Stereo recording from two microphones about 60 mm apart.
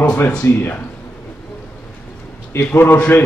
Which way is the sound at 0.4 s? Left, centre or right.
Left.